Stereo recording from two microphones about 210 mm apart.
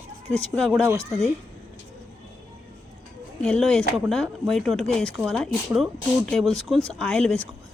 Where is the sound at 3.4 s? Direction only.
Centre (ahead or behind).